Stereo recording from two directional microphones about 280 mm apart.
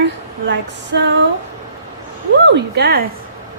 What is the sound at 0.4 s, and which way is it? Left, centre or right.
Music, right.